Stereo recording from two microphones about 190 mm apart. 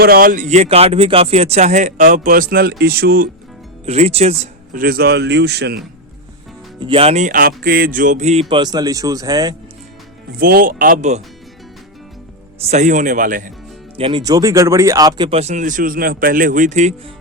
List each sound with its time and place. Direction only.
0.0 s speech: 50° right (ahead or behind)
3.8 s speech: 35° right (ahead or behind)
4.7 s speech: 50° right (ahead or behind)
6.7 s speech: 25° right (ahead or behind)
10.3 s speech: 50° right (ahead or behind)
12.6 s speech: 40° right (ahead or behind)
13.9 s speech: 25° right (ahead or behind)